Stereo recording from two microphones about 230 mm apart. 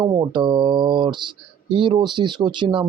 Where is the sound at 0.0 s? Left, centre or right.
Centre.